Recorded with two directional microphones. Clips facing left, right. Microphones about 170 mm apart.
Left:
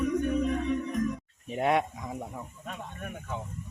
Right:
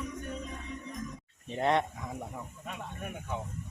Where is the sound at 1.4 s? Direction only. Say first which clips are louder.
Left 2 dB; 10° left (ahead or behind).